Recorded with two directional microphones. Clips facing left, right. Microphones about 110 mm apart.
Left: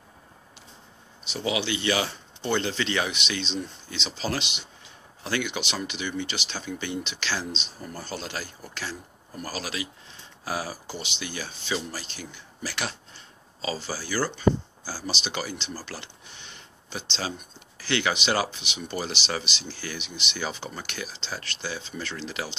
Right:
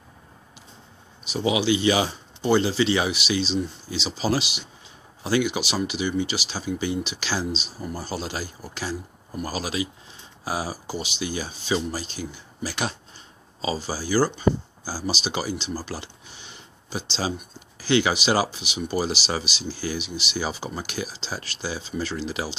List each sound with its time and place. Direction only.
1.3 s speech: 15° right (ahead or behind)